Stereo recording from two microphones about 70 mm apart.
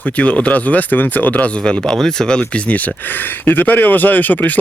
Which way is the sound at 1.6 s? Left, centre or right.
Centre.